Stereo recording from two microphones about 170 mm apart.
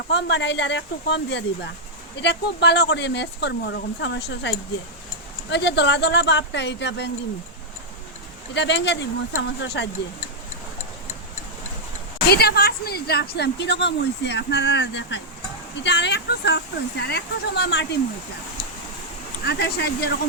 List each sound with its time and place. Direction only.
0.1 s speech: 90° left
8.5 s speech: 90° left
12.3 s a woman's voice: 70° left (ahead or behind)
19.5 s a woman's voice: 75° left (ahead or behind)